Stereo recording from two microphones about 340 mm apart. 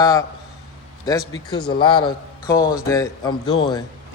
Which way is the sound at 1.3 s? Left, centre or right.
Centre.